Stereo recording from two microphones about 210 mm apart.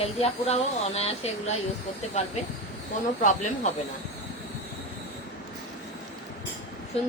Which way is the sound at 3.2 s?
35° left (ahead or behind).